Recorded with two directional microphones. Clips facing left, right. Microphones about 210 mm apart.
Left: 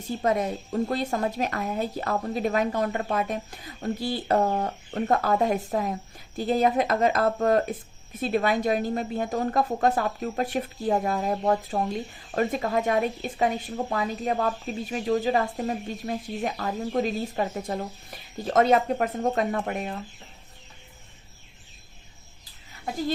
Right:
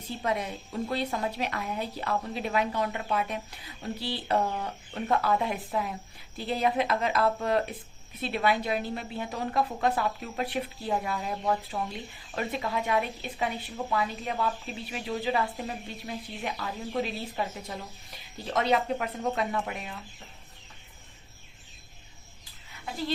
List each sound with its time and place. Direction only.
0.0 s a woman's voice: 45° left (ahead or behind)